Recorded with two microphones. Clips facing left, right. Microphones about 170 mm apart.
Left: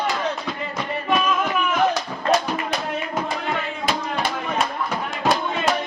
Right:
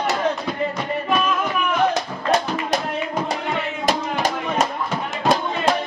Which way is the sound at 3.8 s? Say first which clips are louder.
Right 4 dB; 45° right (ahead or behind).